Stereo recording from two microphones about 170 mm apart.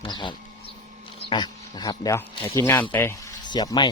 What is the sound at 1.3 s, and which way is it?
Speech, 25° left (ahead or behind).